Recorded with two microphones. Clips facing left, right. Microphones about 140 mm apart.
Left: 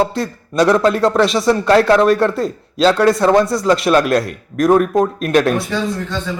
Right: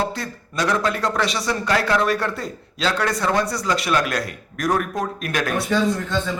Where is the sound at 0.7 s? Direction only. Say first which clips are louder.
Left 8 dB; 25° left (ahead or behind).